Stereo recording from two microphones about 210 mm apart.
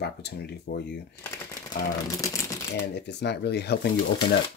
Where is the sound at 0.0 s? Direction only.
50° left (ahead or behind).